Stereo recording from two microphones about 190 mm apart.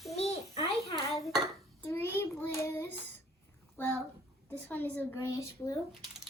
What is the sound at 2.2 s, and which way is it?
Child singing, 15° left (ahead or behind).